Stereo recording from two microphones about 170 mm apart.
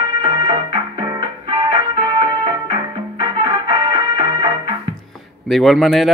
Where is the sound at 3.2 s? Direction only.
30° right (ahead or behind).